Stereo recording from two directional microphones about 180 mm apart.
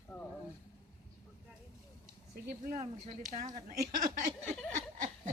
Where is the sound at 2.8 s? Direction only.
40° right (ahead or behind).